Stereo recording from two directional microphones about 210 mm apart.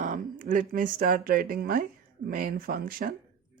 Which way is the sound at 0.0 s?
40° right (ahead or behind).